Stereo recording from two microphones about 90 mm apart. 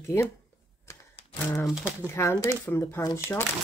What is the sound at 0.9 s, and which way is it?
Music, 35° left (ahead or behind).